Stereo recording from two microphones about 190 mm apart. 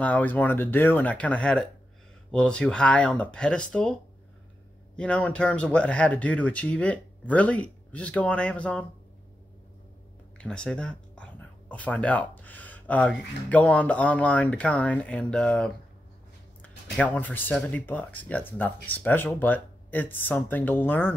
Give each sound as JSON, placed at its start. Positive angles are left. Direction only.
{"t": 0.0, "sound": "speech", "side_deg": 10}
{"t": 4.9, "sound": "speech", "side_deg": 5}
{"t": 10.3, "sound": "speech", "side_deg": 5}
{"t": 16.9, "sound": "speech", "side_deg": 5}